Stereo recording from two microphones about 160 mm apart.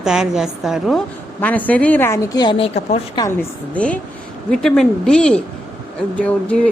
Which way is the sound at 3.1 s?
20° left (ahead or behind).